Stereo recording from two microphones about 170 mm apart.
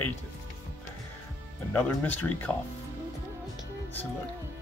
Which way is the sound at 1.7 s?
10° left (ahead or behind).